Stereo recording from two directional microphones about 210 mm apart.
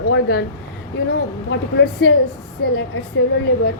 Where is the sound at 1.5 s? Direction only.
55° left (ahead or behind).